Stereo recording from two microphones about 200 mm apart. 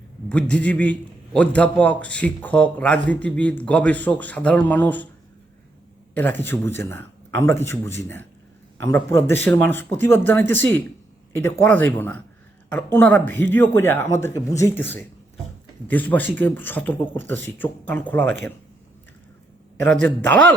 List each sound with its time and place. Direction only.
0.3 s a man's voice: 5° left (ahead or behind)
6.1 s a man's voice: 10° left (ahead or behind)
20.0 s speech: 60° right (ahead or behind)